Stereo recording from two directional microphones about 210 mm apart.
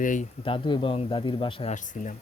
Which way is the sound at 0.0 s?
40° left (ahead or behind).